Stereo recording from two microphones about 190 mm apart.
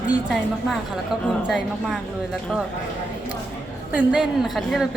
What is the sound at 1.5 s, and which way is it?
Speech, 5° right (ahead or behind).